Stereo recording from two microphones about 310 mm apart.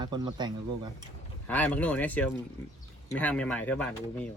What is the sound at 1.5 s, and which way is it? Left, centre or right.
Speech, centre.